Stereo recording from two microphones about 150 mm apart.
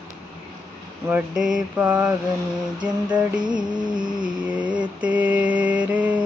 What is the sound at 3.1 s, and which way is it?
Music, 30° right (ahead or behind).